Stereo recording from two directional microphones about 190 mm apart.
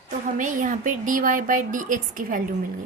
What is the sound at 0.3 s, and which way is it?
A woman's voice, 45° right (ahead or behind).